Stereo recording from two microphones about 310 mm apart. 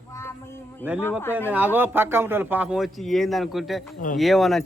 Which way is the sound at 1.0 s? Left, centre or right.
Centre.